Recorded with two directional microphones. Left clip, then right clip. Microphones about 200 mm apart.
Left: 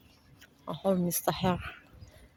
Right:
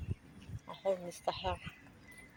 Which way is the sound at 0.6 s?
45° left (ahead or behind).